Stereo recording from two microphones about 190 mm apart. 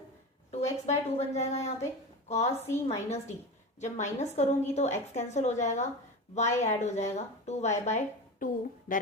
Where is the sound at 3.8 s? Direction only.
40° left (ahead or behind).